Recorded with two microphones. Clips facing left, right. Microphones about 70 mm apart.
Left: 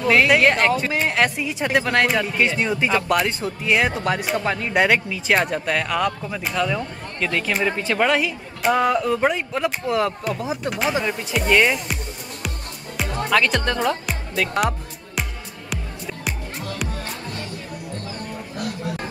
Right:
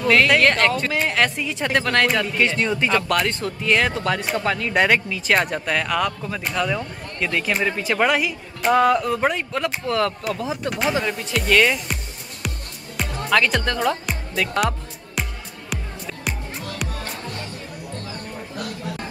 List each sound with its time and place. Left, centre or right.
0.0 s speech: centre
4.7 s speech: centre
12.4 s music: centre